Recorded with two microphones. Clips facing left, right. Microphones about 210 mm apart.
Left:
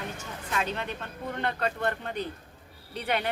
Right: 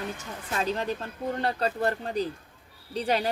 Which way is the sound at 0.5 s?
35° right (ahead or behind).